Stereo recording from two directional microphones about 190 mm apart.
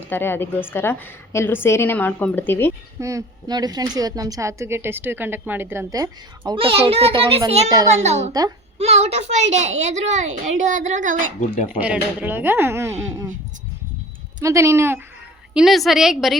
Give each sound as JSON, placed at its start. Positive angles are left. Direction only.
{"t": 0.1, "sound": "a woman's voice", "side_deg": 10}
{"t": 3.0, "sound": "a woman's voice", "side_deg": -15}
{"t": 8.3, "sound": "a woman's voice", "side_deg": -20}
{"t": 8.8, "sound": "a woman's voice", "side_deg": -35}
{"t": 11.8, "sound": "speech", "side_deg": -10}
{"t": 14.4, "sound": "speech", "side_deg": -15}
{"t": 15.5, "sound": "a woman's voice", "side_deg": 0}